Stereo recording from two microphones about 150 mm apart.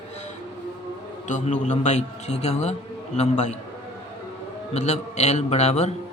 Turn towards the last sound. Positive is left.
turn(degrees=50)  # may be behind; listen again after turning